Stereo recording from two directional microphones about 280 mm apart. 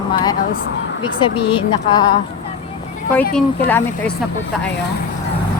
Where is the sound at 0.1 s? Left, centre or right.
Centre.